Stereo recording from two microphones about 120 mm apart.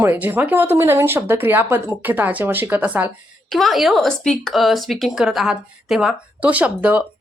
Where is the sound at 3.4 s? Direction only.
Centre (ahead or behind).